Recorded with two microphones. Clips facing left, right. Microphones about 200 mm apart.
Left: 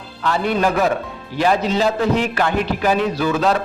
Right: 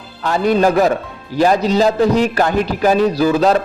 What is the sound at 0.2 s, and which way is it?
A man's voice, 40° right (ahead or behind).